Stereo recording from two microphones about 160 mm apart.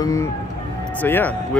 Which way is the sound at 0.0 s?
20° left (ahead or behind).